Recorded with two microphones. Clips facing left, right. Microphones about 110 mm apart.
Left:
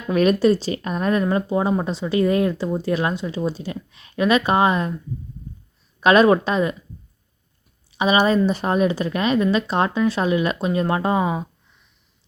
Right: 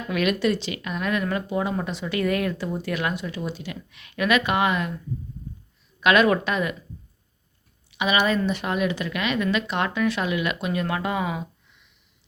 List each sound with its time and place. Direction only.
0.1 s speech: 35° left (ahead or behind)
6.0 s speech: 35° left (ahead or behind)
7.9 s speech: 35° left (ahead or behind)